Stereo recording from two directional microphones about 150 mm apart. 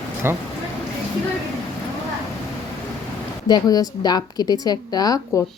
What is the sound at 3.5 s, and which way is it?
A woman's voice, 25° left (ahead or behind).